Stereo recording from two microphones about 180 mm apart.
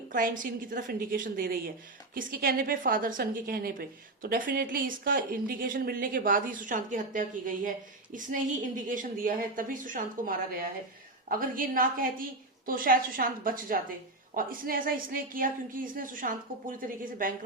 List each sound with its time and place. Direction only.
0.1 s a woman's voice: 50° right (ahead or behind)